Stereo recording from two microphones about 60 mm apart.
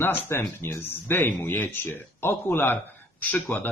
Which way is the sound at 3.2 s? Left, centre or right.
Left.